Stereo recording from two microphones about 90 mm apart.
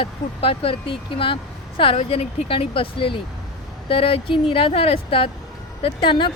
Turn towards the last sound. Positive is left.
turn(degrees=65)  # may be behind; listen again after turning